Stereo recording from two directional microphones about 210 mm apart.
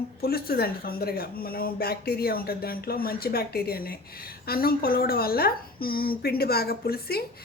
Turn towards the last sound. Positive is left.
turn(degrees=45)  # may be behind; listen again after turning